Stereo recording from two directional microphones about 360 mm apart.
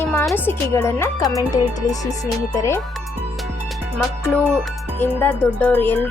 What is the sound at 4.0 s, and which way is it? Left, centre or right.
Speech, centre.